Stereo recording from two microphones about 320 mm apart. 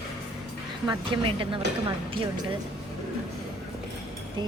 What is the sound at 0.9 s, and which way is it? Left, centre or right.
Speech, centre.